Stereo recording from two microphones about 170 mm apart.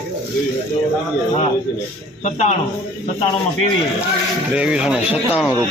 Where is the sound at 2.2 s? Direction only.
40° left (ahead or behind).